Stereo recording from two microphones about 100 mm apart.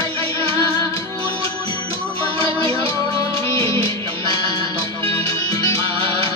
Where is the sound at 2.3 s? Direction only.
65° right (ahead or behind).